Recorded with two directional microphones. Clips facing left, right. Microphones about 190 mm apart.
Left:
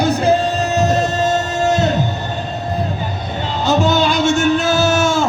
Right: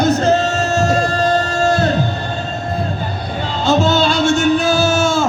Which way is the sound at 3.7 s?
15° left (ahead or behind).